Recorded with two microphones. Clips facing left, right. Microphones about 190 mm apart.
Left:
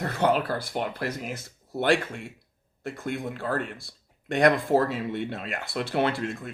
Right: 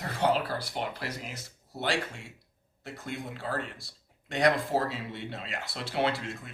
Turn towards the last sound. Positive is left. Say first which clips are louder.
# left 4 dB
turn(degrees=55)  # may be behind; listen again after turning